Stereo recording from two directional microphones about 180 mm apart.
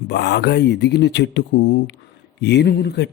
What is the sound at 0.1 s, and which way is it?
Speech, 70° left (ahead or behind).